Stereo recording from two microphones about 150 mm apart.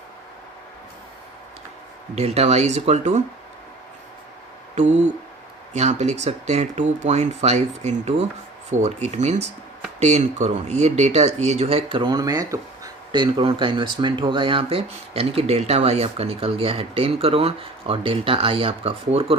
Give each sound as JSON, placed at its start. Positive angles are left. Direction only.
{"t": 2.1, "sound": "speech", "side_deg": -45}
{"t": 4.7, "sound": "a sound", "side_deg": -50}
{"t": 5.7, "sound": "speech", "side_deg": -50}